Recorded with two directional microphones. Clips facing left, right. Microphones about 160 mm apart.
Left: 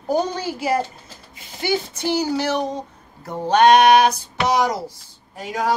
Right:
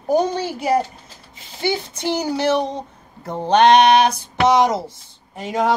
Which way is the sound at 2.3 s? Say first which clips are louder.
Right 3 dB; 20° right (ahead or behind).